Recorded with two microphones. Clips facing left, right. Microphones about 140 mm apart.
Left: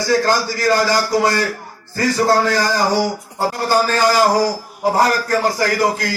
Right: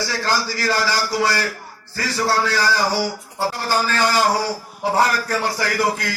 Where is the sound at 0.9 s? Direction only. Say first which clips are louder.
Left 4 dB; 45° left (ahead or behind).